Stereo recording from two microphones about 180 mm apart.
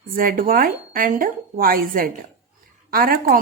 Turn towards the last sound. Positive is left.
turn(degrees=-55)  # may be behind; listen again after turning